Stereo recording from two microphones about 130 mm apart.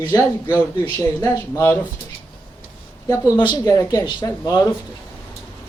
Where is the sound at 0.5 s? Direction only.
20° left (ahead or behind).